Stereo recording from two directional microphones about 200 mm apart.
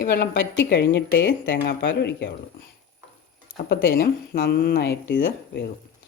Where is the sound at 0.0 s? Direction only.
55° left (ahead or behind).